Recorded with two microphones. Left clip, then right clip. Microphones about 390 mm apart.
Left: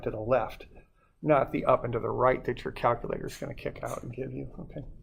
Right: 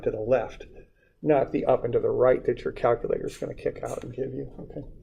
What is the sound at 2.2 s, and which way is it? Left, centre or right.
Speech, left.